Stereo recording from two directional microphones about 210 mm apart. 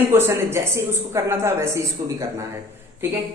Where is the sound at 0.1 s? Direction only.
10° right (ahead or behind).